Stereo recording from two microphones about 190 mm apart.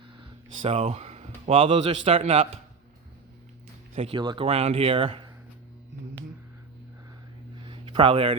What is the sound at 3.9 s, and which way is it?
Speech, 30° right (ahead or behind).